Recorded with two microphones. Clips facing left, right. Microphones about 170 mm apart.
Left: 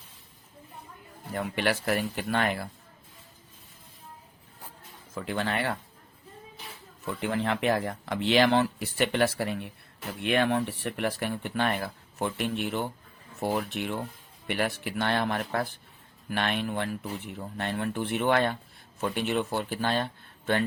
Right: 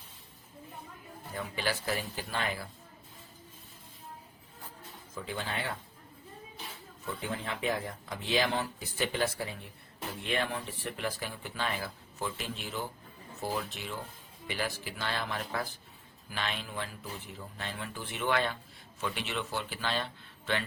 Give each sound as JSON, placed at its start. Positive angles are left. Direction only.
{"t": 1.5, "sound": "speech", "side_deg": 65}
{"t": 5.1, "sound": "speech", "side_deg": 70}
{"t": 7.0, "sound": "speech", "side_deg": 75}